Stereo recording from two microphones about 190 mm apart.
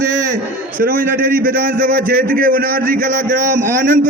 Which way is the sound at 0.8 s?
50° right (ahead or behind).